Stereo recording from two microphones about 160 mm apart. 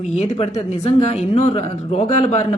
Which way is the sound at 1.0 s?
40° left (ahead or behind).